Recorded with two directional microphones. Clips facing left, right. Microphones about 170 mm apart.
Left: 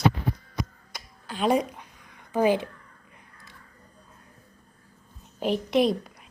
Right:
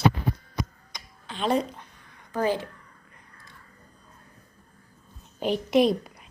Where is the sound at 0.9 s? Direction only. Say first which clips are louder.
Left 3 dB; 5° left (ahead or behind).